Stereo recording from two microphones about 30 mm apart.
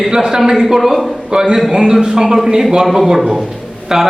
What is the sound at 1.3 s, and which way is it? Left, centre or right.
A man's voice, right.